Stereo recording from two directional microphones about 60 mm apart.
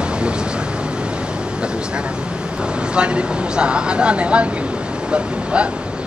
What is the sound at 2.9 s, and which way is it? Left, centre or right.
Speech, centre.